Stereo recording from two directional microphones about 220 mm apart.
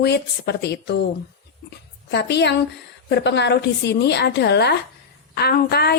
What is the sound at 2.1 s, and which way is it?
A woman's voice, 50° left (ahead or behind).